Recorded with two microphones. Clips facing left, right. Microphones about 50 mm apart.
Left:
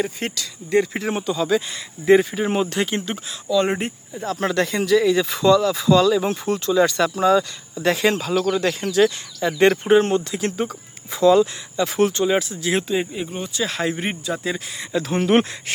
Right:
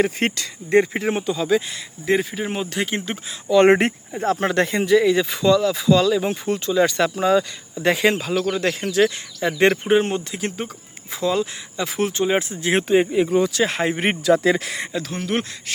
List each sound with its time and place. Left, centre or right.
0.0 s speech: right
0.9 s speech: centre
3.5 s speech: right
4.1 s speech: right
4.4 s speech: right; by 12.2 s centre
12.2 s speech: right
13.1 s speech: right
13.7 s speech: right
14.0 s speech: right
15.2 s speech: left